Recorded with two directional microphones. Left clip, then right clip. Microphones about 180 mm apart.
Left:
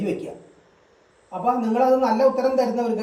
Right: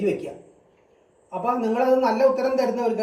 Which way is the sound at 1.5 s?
Centre (ahead or behind).